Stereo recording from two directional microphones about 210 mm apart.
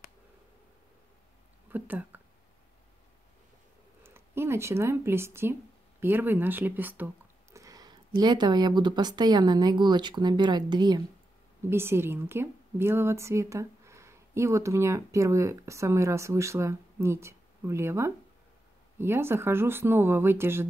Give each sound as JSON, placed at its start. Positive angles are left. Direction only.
{"t": 1.7, "sound": "speech", "side_deg": -10}
{"t": 4.0, "sound": "a woman's voice", "side_deg": -10}